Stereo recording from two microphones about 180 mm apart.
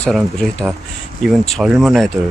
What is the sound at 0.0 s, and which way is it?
Speech, 5° left (ahead or behind).